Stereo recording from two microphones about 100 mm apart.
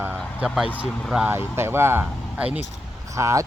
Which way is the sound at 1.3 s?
25° right (ahead or behind).